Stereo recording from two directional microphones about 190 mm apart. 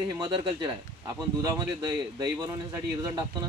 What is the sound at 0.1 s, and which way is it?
Speech, 20° right (ahead or behind).